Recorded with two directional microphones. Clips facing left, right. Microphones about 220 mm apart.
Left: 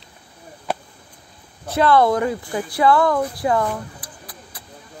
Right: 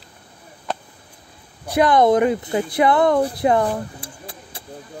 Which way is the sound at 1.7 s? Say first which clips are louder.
Right 1 dB; 15° right (ahead or behind).